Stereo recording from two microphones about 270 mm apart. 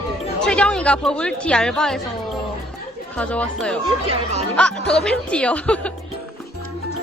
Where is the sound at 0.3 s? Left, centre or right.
Centre.